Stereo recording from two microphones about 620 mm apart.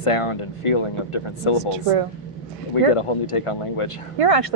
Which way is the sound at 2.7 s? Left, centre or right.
Left.